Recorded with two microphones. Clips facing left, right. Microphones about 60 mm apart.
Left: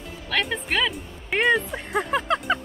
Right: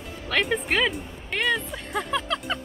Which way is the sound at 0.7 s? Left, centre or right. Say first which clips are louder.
Right 1 dB; centre.